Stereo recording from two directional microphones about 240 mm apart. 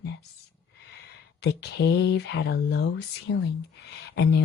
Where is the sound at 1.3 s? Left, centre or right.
Left.